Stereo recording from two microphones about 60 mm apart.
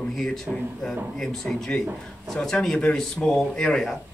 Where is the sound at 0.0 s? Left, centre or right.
Centre.